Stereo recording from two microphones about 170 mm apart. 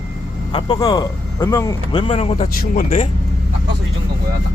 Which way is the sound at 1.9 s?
30° left (ahead or behind).